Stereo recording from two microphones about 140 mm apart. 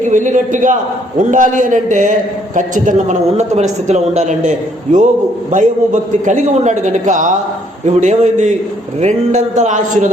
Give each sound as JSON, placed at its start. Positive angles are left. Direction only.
{"t": 0.0, "sound": "a man's voice", "side_deg": -65}